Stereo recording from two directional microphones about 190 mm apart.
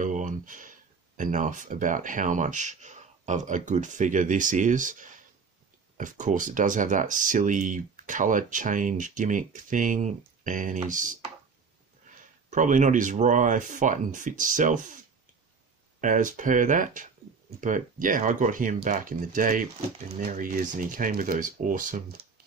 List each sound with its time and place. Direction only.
0.0 s speech: 40° right (ahead or behind)
16.0 s speech: 45° right (ahead or behind)